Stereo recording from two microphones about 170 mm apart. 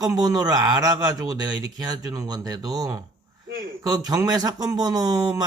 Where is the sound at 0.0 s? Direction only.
20° right (ahead or behind).